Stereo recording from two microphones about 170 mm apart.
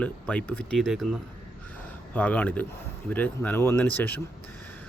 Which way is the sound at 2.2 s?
10° left (ahead or behind).